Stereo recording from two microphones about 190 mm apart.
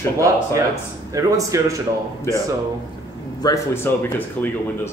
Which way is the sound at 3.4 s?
15° left (ahead or behind).